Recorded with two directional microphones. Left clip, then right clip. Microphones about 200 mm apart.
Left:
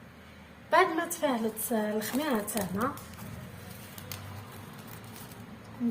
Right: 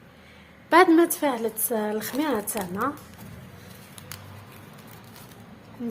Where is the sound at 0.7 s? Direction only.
55° right (ahead or behind).